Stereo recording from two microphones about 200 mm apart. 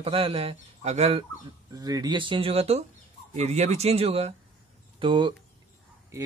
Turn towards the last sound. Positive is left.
turn(degrees=-25)  # may be behind; listen again after turning